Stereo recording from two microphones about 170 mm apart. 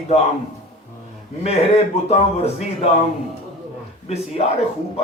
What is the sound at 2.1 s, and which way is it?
Speech, 40° left (ahead or behind).